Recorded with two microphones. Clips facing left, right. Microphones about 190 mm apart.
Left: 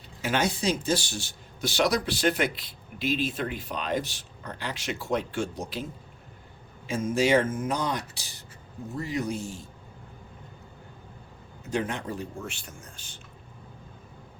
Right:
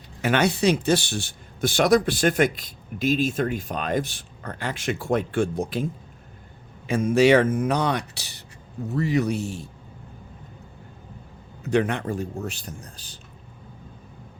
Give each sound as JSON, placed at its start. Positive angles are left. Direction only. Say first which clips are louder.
{"t": 0.2, "sound": "speech", "louder": "right 6 dB", "side_deg": -65}
{"t": 6.8, "sound": "speech", "louder": "right 7 dB", "side_deg": -65}
{"t": 11.6, "sound": "speech", "louder": "right 7 dB", "side_deg": -70}